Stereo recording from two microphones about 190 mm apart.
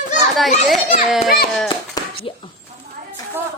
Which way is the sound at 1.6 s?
25° left (ahead or behind).